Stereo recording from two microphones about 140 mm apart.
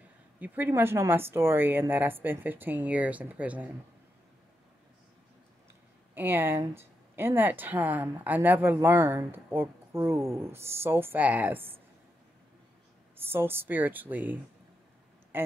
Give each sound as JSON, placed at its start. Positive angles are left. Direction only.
{"t": 0.4, "sound": "speech", "side_deg": -15}
{"t": 6.1, "sound": "speech", "side_deg": -15}
{"t": 13.2, "sound": "speech", "side_deg": -15}